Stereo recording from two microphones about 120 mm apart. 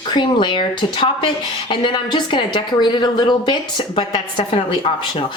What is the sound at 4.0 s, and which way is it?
Speech, 50° left (ahead or behind).